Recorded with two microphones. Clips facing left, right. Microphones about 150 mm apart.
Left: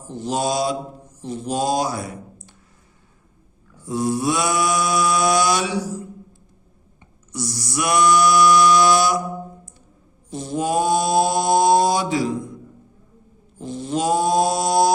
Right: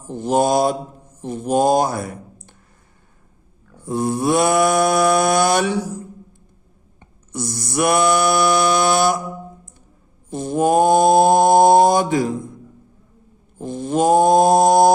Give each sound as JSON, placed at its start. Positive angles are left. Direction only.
{"t": 0.1, "sound": "mantra", "side_deg": -55}
{"t": 1.2, "sound": "speech", "side_deg": -50}
{"t": 3.8, "sound": "a sound", "side_deg": -55}
{"t": 7.0, "sound": "a sound", "side_deg": -55}
{"t": 10.2, "sound": "mantra", "side_deg": -50}
{"t": 13.6, "sound": "mantra", "side_deg": -50}